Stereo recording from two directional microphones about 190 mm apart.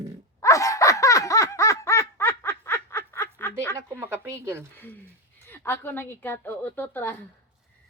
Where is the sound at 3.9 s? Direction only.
10° right (ahead or behind).